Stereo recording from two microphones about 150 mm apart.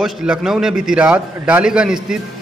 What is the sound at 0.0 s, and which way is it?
A man's voice, 5° right (ahead or behind).